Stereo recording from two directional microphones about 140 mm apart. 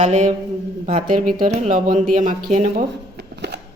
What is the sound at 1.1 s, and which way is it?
Speech, 75° right (ahead or behind).